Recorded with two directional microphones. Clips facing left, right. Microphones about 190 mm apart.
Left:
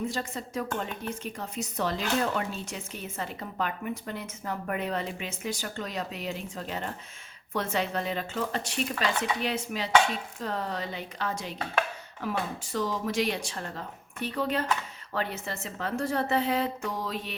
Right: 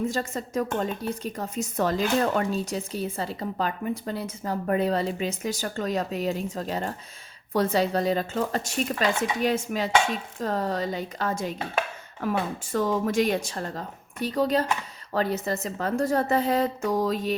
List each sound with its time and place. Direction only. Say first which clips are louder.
0.1 s speech: right 5 dB; 45° right (ahead or behind)
9.4 s dishes: right 6 dB; 45° right (ahead or behind)
15.1 s speech: right 7 dB; 40° right (ahead or behind)